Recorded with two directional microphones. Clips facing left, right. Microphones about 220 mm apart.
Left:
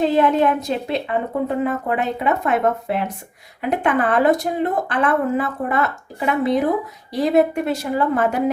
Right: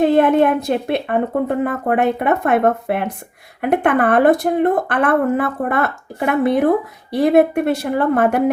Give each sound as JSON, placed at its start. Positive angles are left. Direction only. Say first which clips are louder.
{"t": 0.0, "sound": "speech", "louder": "right 4 dB", "side_deg": -55}